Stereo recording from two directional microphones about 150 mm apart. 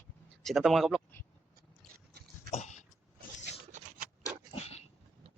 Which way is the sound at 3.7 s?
65° right (ahead or behind).